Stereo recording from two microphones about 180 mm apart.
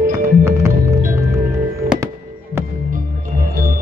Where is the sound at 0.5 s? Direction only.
15° right (ahead or behind).